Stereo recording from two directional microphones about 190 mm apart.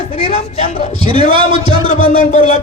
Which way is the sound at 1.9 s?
35° left (ahead or behind).